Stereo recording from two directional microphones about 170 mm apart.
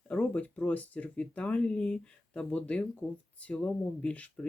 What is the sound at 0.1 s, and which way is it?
Speech, 5° left (ahead or behind).